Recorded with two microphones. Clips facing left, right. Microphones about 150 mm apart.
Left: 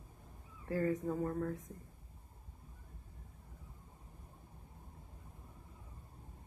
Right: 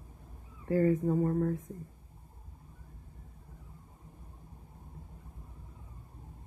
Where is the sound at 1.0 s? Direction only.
30° right (ahead or behind).